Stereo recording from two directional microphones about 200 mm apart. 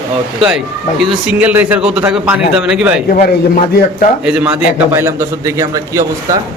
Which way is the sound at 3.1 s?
45° left (ahead or behind).